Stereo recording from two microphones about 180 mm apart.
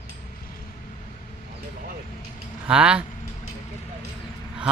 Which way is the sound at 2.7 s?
5° right (ahead or behind).